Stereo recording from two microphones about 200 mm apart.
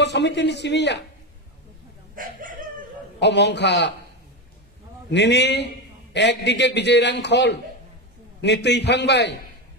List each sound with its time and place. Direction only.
0.0 s a man's voice: 60° left (ahead or behind)
2.1 s chicken: 45° right (ahead or behind)
3.2 s a man's voice: 60° left (ahead or behind)
5.1 s a man's voice: 60° left (ahead or behind)